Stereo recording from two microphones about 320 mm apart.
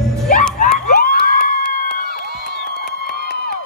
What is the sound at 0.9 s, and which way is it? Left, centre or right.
Crowd, left.